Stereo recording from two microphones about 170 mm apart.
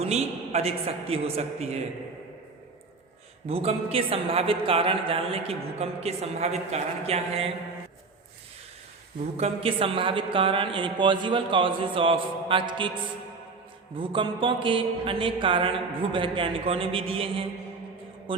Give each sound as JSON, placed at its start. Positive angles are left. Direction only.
{"t": 0.0, "sound": "speech", "side_deg": -40}
{"t": 3.4, "sound": "speech", "side_deg": -35}
{"t": 9.4, "sound": "speech", "side_deg": -35}
{"t": 13.9, "sound": "speech", "side_deg": -30}